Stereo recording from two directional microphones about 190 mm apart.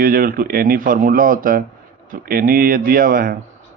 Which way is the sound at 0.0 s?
50° right (ahead or behind).